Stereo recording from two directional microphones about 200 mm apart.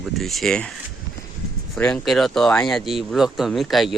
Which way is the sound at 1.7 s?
5° left (ahead or behind).